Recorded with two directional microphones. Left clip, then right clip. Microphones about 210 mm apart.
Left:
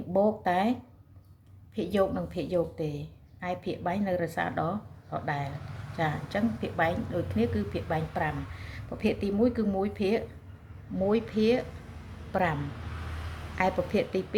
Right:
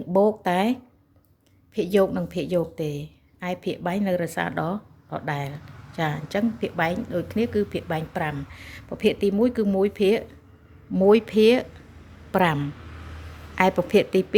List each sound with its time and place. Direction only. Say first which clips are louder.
0.1 s a woman's voice: right 5 dB; 50° right (ahead or behind)
13.6 s a woman's voice: right 8 dB; 50° right (ahead or behind)